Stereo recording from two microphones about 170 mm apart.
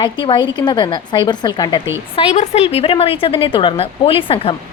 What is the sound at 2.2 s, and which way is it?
A woman's voice, 35° left (ahead or behind).